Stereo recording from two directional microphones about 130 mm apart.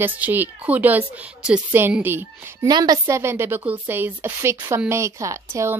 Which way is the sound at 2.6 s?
30° right (ahead or behind).